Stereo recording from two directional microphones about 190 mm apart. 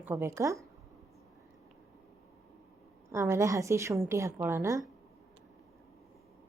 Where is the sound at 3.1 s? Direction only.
15° right (ahead or behind).